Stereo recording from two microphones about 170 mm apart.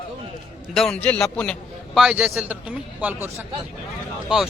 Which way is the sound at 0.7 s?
5° left (ahead or behind).